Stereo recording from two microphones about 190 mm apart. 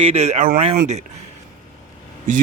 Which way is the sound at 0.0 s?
35° right (ahead or behind).